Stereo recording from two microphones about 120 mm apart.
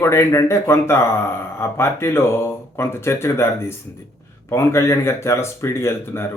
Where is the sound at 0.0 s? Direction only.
20° left (ahead or behind).